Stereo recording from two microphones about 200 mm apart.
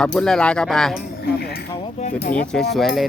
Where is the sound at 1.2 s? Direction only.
50° left (ahead or behind).